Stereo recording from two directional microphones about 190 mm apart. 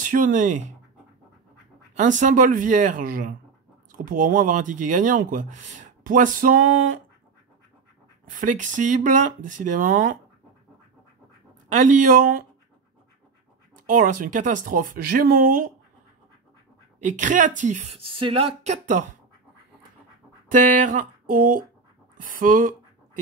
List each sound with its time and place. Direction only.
0.0 s speech: 45° right (ahead or behind)
2.0 s speech: 40° right (ahead or behind)
8.3 s speech: 40° right (ahead or behind)
11.7 s speech: 40° right (ahead or behind)
13.7 s speech: 45° right (ahead or behind)
17.0 s speech: 40° right (ahead or behind)
18.2 s speech: 30° right (ahead or behind)
20.4 s speech: 40° right (ahead or behind)